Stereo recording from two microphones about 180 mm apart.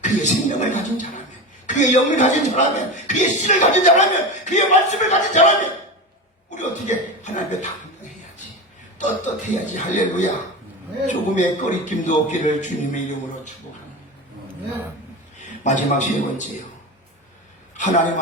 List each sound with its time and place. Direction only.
0.0 s a man's voice: 40° left (ahead or behind)
15.4 s a man's voice: 45° left (ahead or behind)